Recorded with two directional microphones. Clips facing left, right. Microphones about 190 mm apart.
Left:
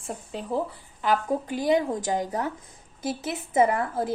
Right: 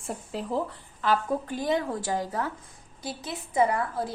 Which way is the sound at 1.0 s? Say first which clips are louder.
Left 1 dB; 15° left (ahead or behind).